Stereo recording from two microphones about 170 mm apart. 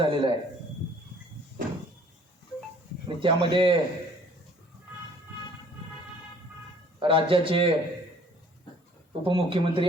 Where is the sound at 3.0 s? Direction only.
30° right (ahead or behind).